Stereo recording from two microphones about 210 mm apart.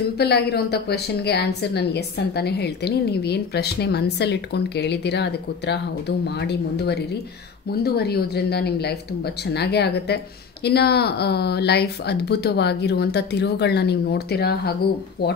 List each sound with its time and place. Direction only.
0.2 s speech: 50° left (ahead or behind)